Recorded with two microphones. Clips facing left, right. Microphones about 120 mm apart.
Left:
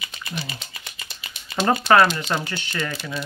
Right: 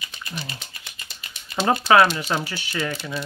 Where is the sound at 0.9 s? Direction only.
90° left.